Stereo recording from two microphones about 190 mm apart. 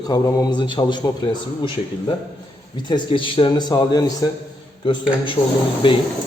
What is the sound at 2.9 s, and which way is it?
A man's voice, 25° left (ahead or behind).